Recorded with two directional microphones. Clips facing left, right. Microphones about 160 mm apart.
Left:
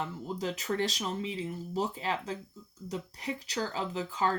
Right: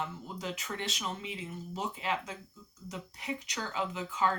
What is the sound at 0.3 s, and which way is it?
Speech, 35° left (ahead or behind).